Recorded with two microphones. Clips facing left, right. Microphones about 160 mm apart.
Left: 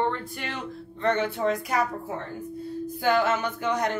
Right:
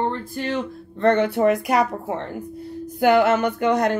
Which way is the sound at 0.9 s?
60° right (ahead or behind).